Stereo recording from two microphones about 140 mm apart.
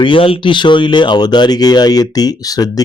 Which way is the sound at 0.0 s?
40° left (ahead or behind).